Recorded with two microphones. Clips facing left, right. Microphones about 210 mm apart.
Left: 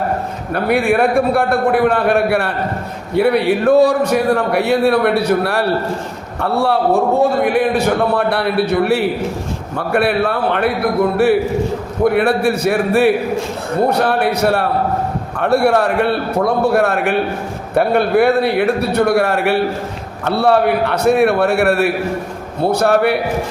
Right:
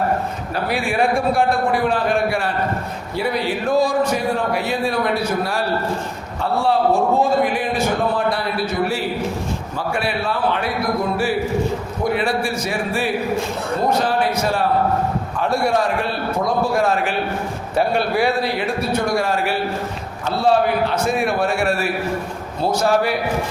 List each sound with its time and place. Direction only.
0.5 s a man's voice: 60° left (ahead or behind)
12.0 s a man's voice: 60° left (ahead or behind)